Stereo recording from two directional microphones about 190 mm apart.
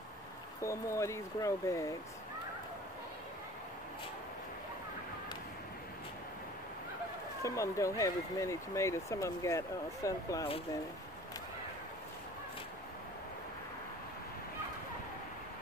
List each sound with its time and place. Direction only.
0.6 s speech: 15° left (ahead or behind)
7.4 s speech: 15° left (ahead or behind)